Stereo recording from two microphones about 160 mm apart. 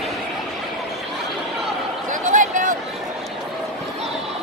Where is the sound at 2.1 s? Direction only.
55° right (ahead or behind).